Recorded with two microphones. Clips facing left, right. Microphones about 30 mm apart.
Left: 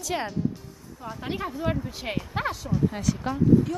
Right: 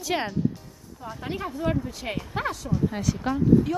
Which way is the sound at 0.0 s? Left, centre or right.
Right.